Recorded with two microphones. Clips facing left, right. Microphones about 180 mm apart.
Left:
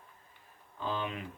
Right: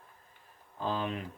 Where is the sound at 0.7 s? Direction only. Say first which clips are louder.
Right 2 dB; 40° right (ahead or behind).